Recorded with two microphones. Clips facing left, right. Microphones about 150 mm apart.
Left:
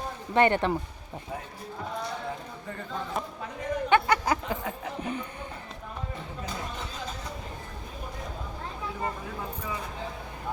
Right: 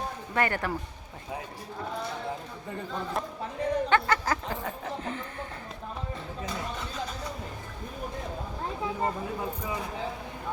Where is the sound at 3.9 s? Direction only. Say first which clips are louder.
Left 6 dB; 15° left (ahead or behind).